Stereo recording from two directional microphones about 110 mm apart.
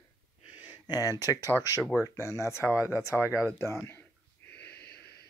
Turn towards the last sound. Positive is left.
turn(degrees=15)  # may be behind; listen again after turning